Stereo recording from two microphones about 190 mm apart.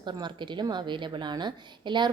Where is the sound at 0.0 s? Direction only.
25° right (ahead or behind).